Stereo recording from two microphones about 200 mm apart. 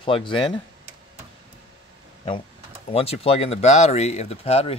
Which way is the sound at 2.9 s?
30° left (ahead or behind).